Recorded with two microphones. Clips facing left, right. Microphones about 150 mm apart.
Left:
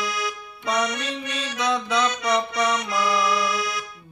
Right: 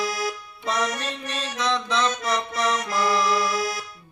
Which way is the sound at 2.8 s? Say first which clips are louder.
Even; 40° right (ahead or behind).